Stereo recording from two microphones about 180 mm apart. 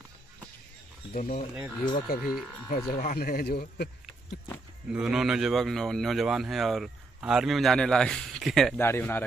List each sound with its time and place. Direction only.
1.1 s a man's voice: 50° left (ahead or behind)
4.9 s speech: 5° right (ahead or behind)
8.8 s speech: 10° left (ahead or behind)